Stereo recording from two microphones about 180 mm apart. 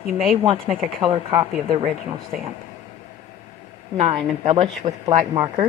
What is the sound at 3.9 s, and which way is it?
Speech, 30° right (ahead or behind).